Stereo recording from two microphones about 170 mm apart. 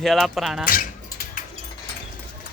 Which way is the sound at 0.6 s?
55° left (ahead or behind).